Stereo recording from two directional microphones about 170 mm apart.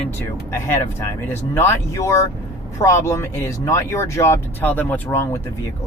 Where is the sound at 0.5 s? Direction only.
15° left (ahead or behind).